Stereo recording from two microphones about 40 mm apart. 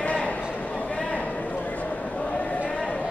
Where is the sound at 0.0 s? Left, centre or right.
Left.